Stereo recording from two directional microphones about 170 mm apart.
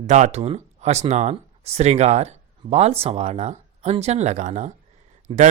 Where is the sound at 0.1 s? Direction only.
40° right (ahead or behind).